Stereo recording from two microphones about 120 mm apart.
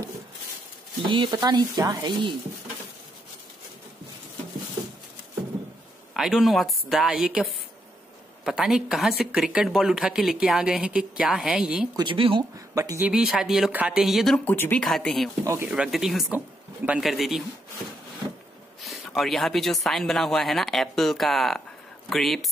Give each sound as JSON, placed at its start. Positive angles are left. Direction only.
{"t": 1.0, "sound": "speech", "side_deg": -45}
{"t": 1.3, "sound": "speech", "side_deg": -30}
{"t": 6.1, "sound": "speech", "side_deg": -5}
{"t": 8.5, "sound": "speech", "side_deg": -5}
{"t": 12.0, "sound": "speech", "side_deg": -45}
{"t": 12.5, "sound": "speech", "side_deg": -30}
{"t": 13.0, "sound": "speech", "side_deg": -5}
{"t": 14.4, "sound": "speech", "side_deg": 15}
{"t": 14.9, "sound": "speech", "side_deg": 5}
{"t": 15.4, "sound": "speech", "side_deg": -25}
{"t": 15.7, "sound": "speech", "side_deg": -5}
{"t": 18.8, "sound": "speech", "side_deg": 0}